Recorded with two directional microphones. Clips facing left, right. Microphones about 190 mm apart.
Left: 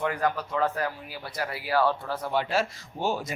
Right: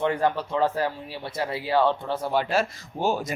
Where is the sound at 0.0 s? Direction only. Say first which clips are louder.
Right 4 dB; 30° right (ahead or behind).